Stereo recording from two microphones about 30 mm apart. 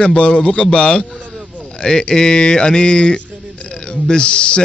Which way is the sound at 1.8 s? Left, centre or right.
Left.